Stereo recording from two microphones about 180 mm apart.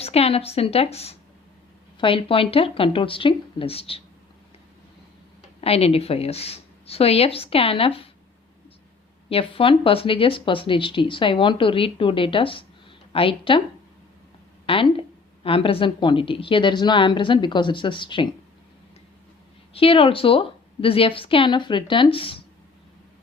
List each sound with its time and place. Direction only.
0.0 s speech: 35° left (ahead or behind)
5.5 s speech: 35° left (ahead or behind)
9.3 s speech: 30° left (ahead or behind)
14.7 s speech: 30° left (ahead or behind)
19.7 s speech: 30° left (ahead or behind)